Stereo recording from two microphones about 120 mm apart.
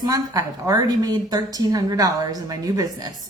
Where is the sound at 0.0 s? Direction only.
30° right (ahead or behind).